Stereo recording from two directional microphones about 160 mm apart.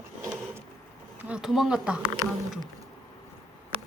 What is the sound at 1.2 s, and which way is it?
Speech, 5° right (ahead or behind).